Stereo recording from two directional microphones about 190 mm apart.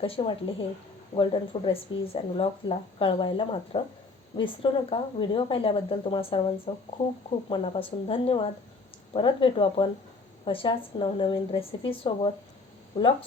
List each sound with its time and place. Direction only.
0.0 s speech: 30° left (ahead or behind)